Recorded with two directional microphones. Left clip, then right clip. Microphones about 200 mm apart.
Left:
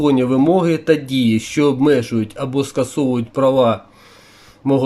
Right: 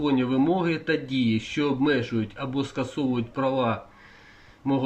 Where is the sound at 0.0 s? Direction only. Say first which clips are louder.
Left 9 dB; 30° left (ahead or behind).